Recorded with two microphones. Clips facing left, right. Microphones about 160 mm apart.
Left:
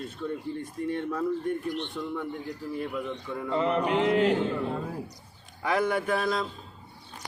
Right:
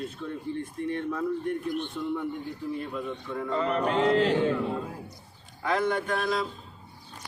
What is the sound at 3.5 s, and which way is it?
Mantra, 20° left (ahead or behind).